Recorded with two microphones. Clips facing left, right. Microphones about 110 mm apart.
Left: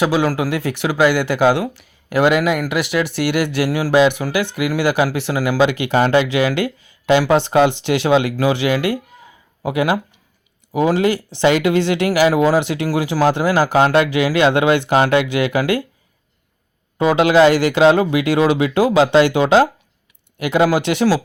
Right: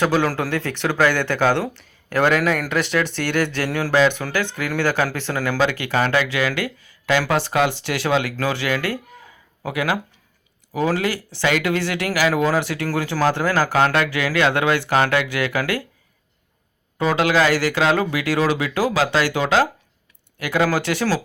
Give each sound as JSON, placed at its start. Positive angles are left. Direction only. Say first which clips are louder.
{"t": 0.0, "sound": "speech", "louder": "left 3 dB", "side_deg": 10}
{"t": 17.0, "sound": "speech", "louder": "left 6 dB", "side_deg": 20}